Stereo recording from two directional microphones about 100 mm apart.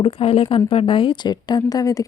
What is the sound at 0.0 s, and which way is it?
Speech, 65° left (ahead or behind).